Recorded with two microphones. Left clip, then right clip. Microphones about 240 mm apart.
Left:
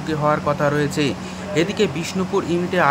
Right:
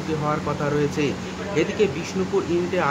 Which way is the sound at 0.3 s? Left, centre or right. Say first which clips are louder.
Left 7 dB; left.